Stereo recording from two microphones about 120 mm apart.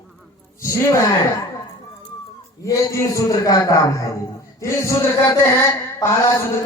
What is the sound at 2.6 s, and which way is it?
A man's voice, 25° left (ahead or behind).